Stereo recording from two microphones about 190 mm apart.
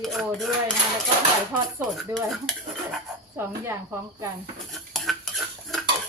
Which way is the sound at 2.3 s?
Centre (ahead or behind).